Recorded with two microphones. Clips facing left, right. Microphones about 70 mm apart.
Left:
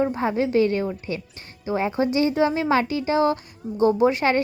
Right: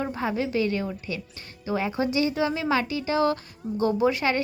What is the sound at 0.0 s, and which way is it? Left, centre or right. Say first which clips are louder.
A woman's voice: left 5 dB; left.